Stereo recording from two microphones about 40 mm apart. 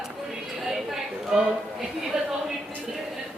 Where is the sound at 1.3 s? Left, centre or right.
Centre.